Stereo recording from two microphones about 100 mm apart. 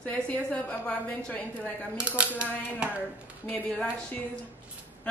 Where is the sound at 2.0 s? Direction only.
10° right (ahead or behind).